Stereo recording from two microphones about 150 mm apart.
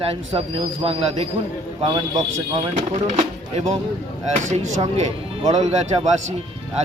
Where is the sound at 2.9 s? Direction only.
50° right (ahead or behind).